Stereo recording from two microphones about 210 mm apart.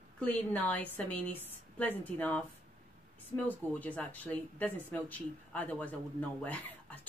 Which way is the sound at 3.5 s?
10° left (ahead or behind).